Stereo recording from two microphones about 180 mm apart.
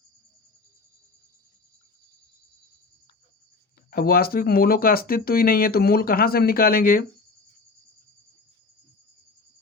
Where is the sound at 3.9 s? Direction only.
55° left (ahead or behind).